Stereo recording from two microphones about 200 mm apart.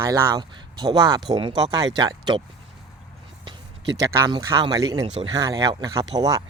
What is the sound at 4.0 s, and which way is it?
Speech, 15° right (ahead or behind).